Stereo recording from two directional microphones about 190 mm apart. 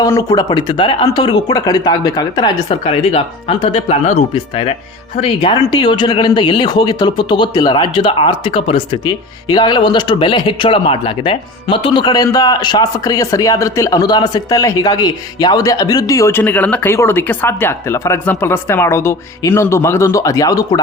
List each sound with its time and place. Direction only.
0.0 s speech: 15° left (ahead or behind)